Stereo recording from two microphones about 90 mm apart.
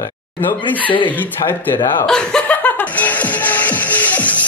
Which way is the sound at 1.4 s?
25° left (ahead or behind).